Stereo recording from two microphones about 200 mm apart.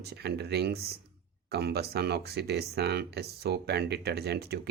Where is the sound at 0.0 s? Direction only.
55° right (ahead or behind).